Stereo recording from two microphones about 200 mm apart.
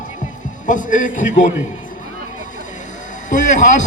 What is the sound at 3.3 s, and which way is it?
Speech, 40° left (ahead or behind).